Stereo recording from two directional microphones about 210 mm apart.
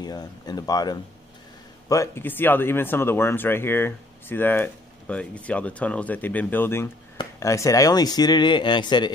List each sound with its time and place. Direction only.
0.0 s speech: 20° left (ahead or behind)